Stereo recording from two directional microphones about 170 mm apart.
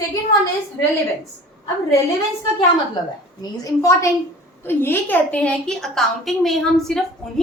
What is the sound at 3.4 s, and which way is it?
A woman's voice, 20° left (ahead or behind).